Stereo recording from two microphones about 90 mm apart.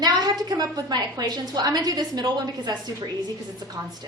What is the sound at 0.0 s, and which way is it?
A woman's voice, 45° right (ahead or behind).